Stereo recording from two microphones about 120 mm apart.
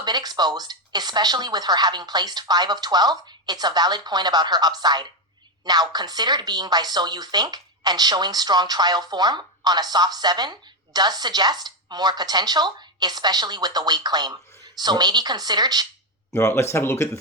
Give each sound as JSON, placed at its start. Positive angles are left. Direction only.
{"t": 0.0, "sound": "speech", "side_deg": -35}
{"t": 16.3, "sound": "speech", "side_deg": 20}